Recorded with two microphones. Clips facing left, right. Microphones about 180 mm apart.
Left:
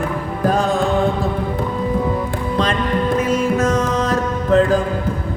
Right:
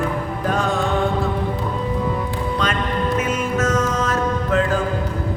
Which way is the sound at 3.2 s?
35° left (ahead or behind).